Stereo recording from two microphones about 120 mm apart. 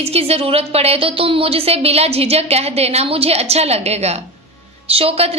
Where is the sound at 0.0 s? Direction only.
55° right (ahead or behind).